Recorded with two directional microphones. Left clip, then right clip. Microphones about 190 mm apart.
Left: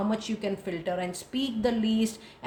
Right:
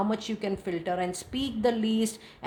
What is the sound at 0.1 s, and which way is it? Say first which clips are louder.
A woman's voice: even; 30° right (ahead or behind).